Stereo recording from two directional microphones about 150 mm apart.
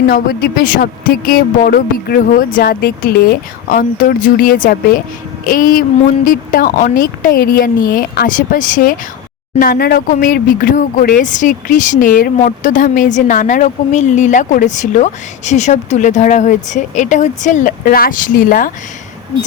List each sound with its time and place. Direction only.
0.1 s a woman's voice: 85° left; by 9.0 s 65° left (ahead or behind)
9.6 s speech: 90° left; by 18.7 s 65° left (ahead or behind)